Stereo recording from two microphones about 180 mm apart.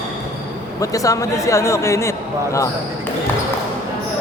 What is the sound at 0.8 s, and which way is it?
A man's voice, 20° left (ahead or behind).